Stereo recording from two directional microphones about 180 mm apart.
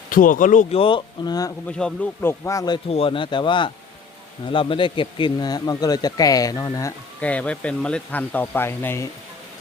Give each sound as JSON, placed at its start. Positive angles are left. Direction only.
{"t": 0.1, "sound": "speech", "side_deg": 50}
{"t": 0.8, "sound": "speech", "side_deg": 25}
{"t": 1.6, "sound": "speech", "side_deg": 10}
{"t": 7.2, "sound": "speech", "side_deg": 5}